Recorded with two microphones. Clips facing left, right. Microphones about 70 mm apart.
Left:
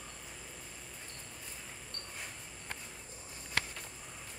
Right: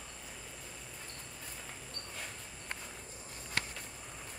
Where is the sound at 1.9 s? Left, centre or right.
Centre.